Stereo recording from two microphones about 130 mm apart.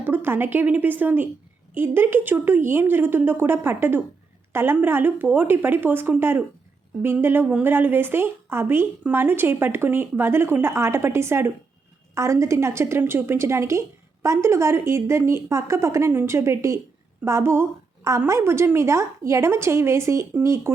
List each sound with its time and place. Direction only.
0.0 s a woman's voice: 15° right (ahead or behind)